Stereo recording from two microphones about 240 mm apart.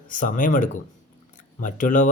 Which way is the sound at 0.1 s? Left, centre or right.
Left.